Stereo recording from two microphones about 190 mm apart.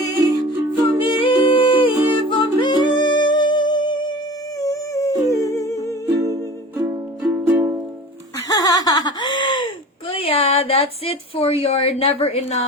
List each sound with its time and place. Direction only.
0.2 s music: 10° right (ahead or behind)
1.0 s humming: 25° left (ahead or behind)
2.3 s music: 25° left (ahead or behind)
5.9 s music: 15° right (ahead or behind)
6.7 s music: 5° right (ahead or behind)
8.4 s laughter: 20° left (ahead or behind)
10.1 s a woman's voice: 30° left (ahead or behind)